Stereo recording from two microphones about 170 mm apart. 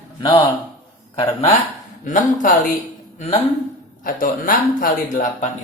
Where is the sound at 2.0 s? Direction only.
50° left (ahead or behind).